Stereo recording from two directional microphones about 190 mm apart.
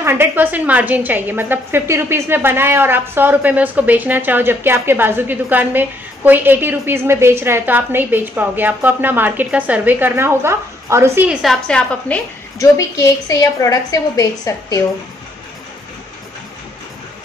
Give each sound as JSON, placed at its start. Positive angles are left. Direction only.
{"t": 0.0, "sound": "a woman's voice", "side_deg": -10}
{"t": 11.4, "sound": "a woman's voice", "side_deg": 5}
{"t": 12.5, "sound": "a woman's voice", "side_deg": 15}